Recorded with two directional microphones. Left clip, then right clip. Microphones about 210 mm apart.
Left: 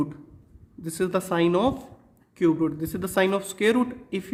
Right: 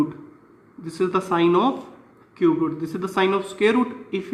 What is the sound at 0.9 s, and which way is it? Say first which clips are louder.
Speech: right 4 dB; 50° left (ahead or behind).